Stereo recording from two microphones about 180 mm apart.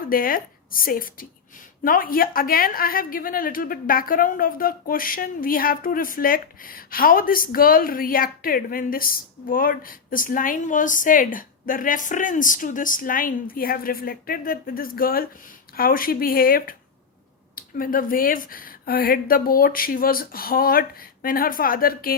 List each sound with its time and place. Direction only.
0.0 s a woman's voice: 50° left (ahead or behind)